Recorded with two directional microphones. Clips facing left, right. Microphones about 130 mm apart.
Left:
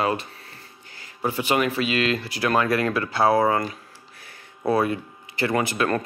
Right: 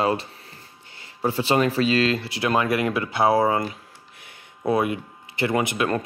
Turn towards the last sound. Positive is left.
turn(degrees=-20)  # may be behind; listen again after turning